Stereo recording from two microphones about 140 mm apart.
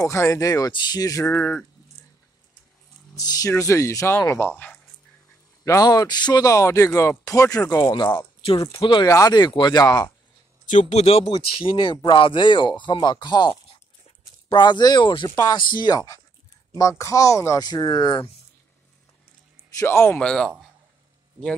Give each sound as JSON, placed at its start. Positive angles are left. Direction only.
{"t": 0.0, "sound": "speech", "side_deg": 20}
{"t": 1.2, "sound": "speech", "side_deg": 10}
{"t": 3.2, "sound": "speech", "side_deg": 25}
{"t": 5.7, "sound": "speech", "side_deg": 25}
{"t": 10.7, "sound": "speech", "side_deg": 60}
{"t": 11.2, "sound": "speech", "side_deg": 35}
{"t": 15.3, "sound": "speech", "side_deg": 20}
{"t": 19.8, "sound": "speech", "side_deg": 15}
{"t": 20.2, "sound": "speech", "side_deg": 5}